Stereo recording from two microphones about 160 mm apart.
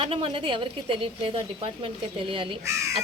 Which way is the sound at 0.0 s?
35° right (ahead or behind).